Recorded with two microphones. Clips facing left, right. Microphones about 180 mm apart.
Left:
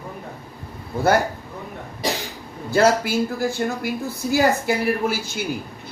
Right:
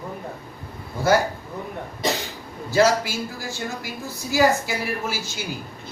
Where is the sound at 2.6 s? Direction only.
55° left (ahead or behind).